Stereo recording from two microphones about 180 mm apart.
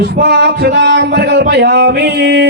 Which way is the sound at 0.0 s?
65° right (ahead or behind).